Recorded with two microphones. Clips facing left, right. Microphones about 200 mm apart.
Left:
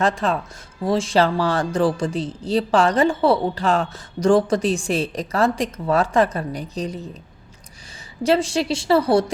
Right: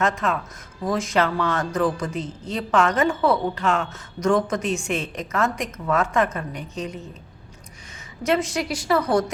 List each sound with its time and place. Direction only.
0.0 s speech: 30° left (ahead or behind)
8.2 s a woman's voice: 30° left (ahead or behind)